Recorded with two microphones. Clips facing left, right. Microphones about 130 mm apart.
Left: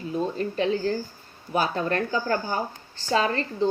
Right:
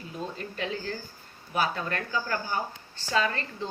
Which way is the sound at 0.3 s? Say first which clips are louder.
Left 9 dB; 35° left (ahead or behind).